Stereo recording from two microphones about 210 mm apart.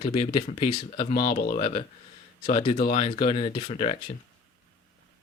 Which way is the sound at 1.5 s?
25° left (ahead or behind).